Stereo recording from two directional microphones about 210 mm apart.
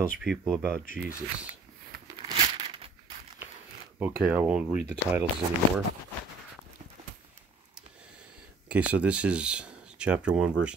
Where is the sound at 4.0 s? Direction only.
10° right (ahead or behind).